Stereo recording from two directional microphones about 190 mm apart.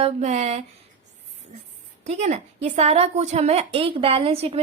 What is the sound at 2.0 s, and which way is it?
A woman's voice, 35° right (ahead or behind).